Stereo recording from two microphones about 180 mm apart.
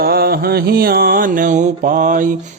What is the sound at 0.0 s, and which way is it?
Mantra, 55° right (ahead or behind).